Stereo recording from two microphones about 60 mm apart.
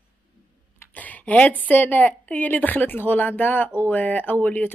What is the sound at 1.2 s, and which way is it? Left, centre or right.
Speech, left.